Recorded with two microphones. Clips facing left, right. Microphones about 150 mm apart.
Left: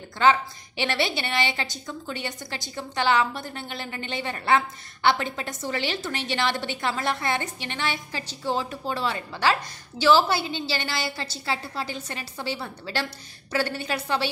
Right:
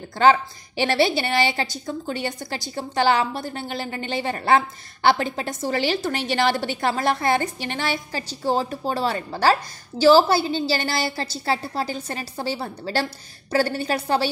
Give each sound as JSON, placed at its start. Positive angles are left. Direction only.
{"t": 0.2, "sound": "a woman's voice", "side_deg": -40}